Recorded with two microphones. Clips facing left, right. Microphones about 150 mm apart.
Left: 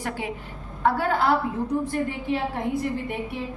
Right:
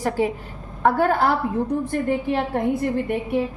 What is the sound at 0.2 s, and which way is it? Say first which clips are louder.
Speech: right 10 dB; 40° right (ahead or behind).